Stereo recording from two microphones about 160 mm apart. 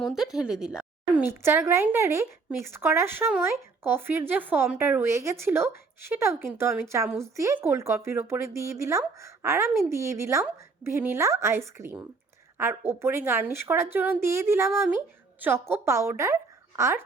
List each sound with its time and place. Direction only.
0.0 s a woman's voice: centre (ahead or behind); by 17.0 s 15° right (ahead or behind)